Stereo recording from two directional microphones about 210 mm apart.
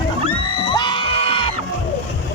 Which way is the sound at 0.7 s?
20° left (ahead or behind).